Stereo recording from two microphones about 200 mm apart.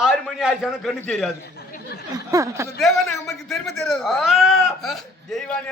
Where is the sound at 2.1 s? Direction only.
15° right (ahead or behind).